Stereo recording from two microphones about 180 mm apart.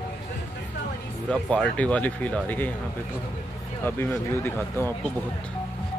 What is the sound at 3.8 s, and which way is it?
Speech, 15° left (ahead or behind).